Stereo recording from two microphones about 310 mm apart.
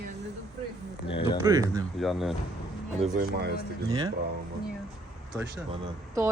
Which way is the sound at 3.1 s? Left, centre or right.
Right.